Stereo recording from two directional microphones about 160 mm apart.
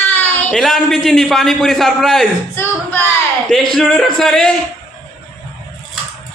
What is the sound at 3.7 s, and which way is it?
Speech, 5° left (ahead or behind).